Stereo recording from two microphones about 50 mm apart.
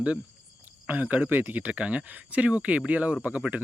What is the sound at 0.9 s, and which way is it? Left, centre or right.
Speech, right.